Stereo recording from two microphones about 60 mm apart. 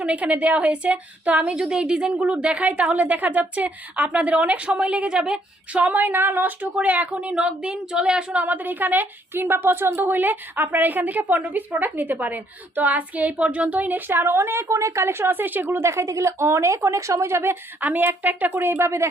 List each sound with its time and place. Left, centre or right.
0.0 s a woman's voice: right
5.8 s a woman's voice: right; by 8.4 s centre
8.4 s a woman's voice: right